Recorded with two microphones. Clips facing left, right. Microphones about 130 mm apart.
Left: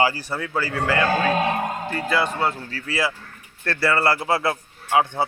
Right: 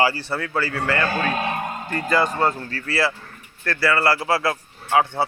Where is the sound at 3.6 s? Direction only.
25° left (ahead or behind).